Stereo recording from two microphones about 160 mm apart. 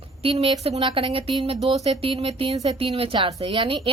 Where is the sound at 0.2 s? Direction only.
35° right (ahead or behind).